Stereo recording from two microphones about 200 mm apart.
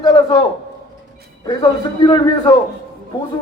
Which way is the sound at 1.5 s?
20° left (ahead or behind).